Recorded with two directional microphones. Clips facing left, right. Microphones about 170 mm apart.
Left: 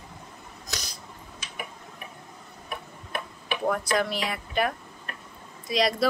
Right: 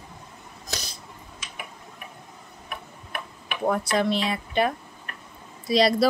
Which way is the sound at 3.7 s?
25° right (ahead or behind).